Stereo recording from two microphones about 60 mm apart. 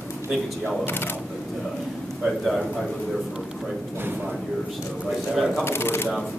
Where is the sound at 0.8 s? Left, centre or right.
Left.